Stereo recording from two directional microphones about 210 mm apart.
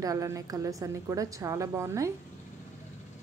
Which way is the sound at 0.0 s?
15° right (ahead or behind).